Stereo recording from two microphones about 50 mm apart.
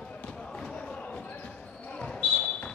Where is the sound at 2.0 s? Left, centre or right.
Left.